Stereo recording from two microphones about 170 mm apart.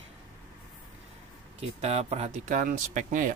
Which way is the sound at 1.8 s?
40° right (ahead or behind).